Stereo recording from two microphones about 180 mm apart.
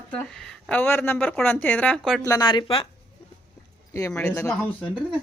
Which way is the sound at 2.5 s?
30° left (ahead or behind).